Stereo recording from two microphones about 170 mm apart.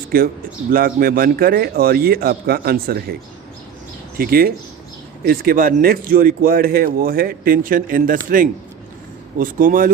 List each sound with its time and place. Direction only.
0.1 s speech: 60° right (ahead or behind)
4.2 s speech: 60° right (ahead or behind)